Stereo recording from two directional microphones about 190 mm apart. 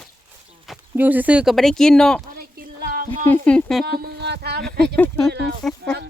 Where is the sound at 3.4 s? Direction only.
5° left (ahead or behind).